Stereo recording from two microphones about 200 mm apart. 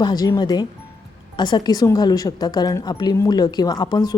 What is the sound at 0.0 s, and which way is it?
A woman's voice, 20° left (ahead or behind).